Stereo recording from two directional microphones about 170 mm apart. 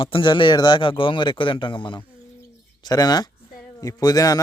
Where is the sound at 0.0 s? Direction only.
30° left (ahead or behind).